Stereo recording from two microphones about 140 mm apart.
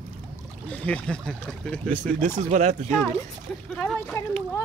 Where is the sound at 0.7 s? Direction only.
10° left (ahead or behind).